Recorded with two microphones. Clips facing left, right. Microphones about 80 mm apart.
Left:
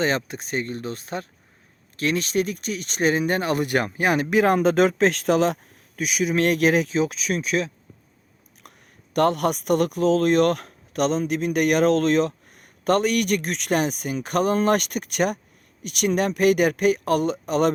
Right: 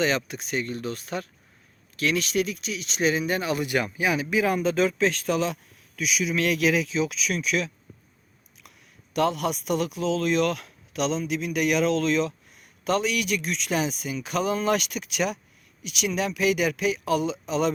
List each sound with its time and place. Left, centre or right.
0.2 s speech: left
6.0 s speech: left
8.6 s a sound: left
9.1 s speech: left